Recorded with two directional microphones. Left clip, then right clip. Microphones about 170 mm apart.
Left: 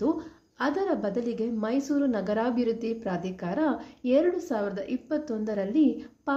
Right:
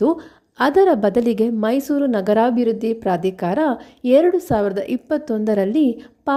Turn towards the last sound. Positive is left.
turn(degrees=-50)  # may be behind; listen again after turning